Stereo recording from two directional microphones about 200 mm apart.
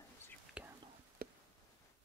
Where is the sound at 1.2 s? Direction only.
50° right (ahead or behind).